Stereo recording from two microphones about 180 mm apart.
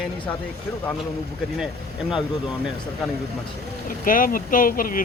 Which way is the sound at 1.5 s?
5° right (ahead or behind).